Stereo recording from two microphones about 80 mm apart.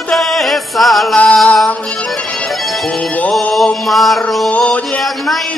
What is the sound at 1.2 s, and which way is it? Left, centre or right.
Music, centre.